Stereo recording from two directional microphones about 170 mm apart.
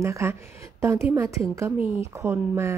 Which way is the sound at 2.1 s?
15° right (ahead or behind).